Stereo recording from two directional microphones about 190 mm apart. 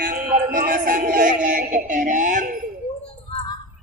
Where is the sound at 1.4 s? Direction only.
45° right (ahead or behind).